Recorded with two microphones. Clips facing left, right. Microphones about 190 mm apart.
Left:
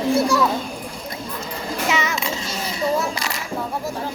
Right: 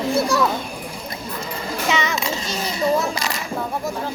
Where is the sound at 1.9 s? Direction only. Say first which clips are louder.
Right 1 dB; 5° left (ahead or behind).